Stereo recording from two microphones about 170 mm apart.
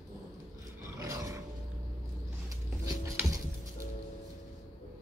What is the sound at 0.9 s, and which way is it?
Roar, 20° right (ahead or behind).